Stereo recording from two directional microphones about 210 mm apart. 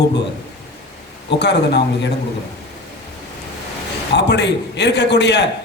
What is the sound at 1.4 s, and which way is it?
Speech, 55° left (ahead or behind).